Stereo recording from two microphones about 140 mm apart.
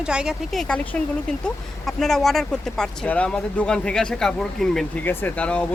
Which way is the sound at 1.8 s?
5° left (ahead or behind).